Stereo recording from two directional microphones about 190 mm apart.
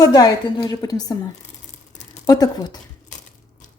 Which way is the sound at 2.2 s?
20° left (ahead or behind).